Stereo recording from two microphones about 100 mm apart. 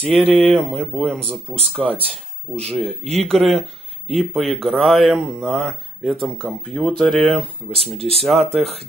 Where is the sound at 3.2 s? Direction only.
5° left (ahead or behind).